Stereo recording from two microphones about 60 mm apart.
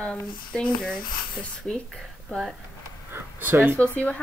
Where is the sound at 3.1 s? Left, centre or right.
Right.